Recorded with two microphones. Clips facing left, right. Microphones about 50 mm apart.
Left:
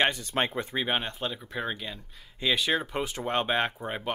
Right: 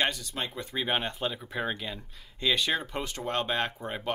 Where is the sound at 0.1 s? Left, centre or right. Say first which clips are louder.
Left 7 dB; left.